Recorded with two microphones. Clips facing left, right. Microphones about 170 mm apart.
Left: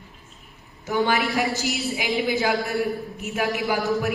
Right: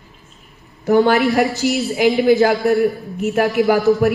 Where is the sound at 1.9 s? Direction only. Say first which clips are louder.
Right 13 dB; 45° right (ahead or behind).